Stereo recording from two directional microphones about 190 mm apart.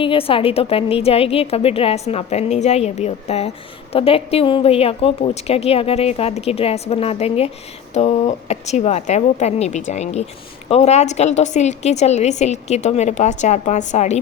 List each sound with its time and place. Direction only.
0.0 s a woman's voice: 30° left (ahead or behind)